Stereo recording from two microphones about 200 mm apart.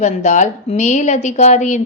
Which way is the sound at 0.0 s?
35° left (ahead or behind).